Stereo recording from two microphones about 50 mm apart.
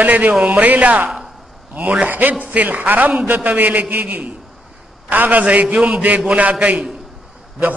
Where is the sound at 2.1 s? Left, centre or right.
Right.